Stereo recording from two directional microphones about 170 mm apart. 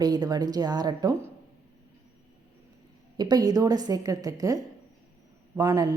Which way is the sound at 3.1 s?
25° right (ahead or behind).